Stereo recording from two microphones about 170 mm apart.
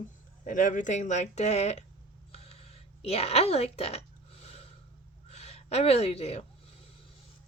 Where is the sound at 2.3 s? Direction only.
35° left (ahead or behind).